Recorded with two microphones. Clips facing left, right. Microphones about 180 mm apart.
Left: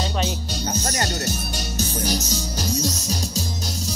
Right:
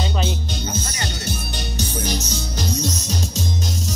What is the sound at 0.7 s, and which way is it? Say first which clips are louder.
Music: left 4 dB; 40° left (ahead or behind).